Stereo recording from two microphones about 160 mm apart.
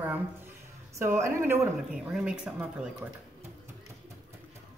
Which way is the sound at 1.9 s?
5° right (ahead or behind).